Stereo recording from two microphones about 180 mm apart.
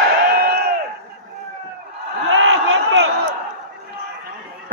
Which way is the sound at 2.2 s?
90° right.